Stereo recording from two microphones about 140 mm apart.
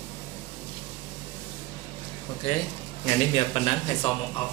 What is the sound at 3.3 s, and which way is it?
Speech, 45° left (ahead or behind).